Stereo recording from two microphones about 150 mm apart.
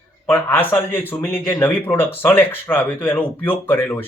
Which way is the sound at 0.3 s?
15° left (ahead or behind).